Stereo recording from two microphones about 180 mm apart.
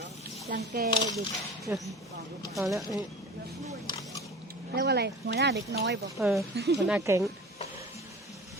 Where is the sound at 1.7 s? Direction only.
10° right (ahead or behind).